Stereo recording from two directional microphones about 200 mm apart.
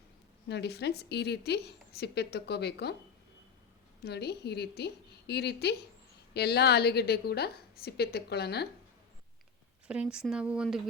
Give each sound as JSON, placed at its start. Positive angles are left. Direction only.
{"t": 0.4, "sound": "a woman's voice", "side_deg": 55}
{"t": 4.0, "sound": "a woman's voice", "side_deg": 55}
{"t": 9.8, "sound": "speech", "side_deg": -5}